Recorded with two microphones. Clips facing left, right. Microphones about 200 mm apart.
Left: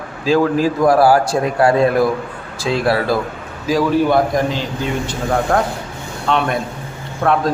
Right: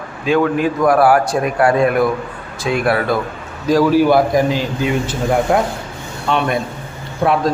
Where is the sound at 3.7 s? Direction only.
Centre (ahead or behind).